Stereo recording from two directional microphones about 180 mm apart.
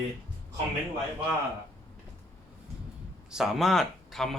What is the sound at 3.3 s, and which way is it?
Speech, centre (ahead or behind).